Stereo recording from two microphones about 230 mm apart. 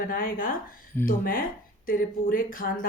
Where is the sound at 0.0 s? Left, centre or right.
Left.